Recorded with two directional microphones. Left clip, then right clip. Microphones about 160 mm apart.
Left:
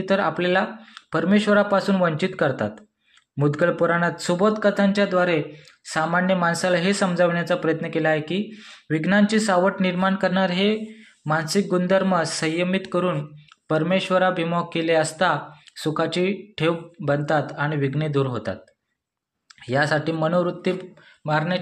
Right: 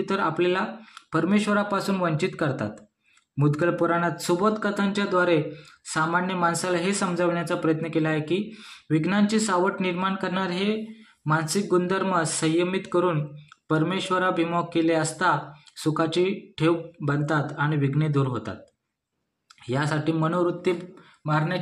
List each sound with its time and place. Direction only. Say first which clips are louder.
0.0 s speech: left 3 dB; 35° left (ahead or behind)
19.6 s speech: left 5 dB; 30° left (ahead or behind)
21.3 s speech: left 3 dB; 45° left (ahead or behind)